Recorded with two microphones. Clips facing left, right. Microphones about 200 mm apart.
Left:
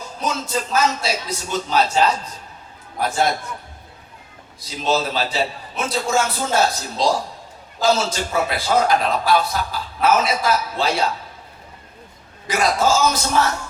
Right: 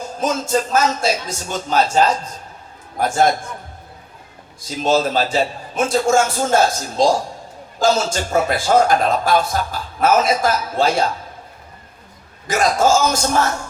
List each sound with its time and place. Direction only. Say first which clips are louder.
0.2 s a man's voice: right 5 dB; 50° right (ahead or behind)
4.8 s a man's voice: right 4 dB; 50° right (ahead or behind)
12.5 s a man's voice: right 3 dB; 45° right (ahead or behind)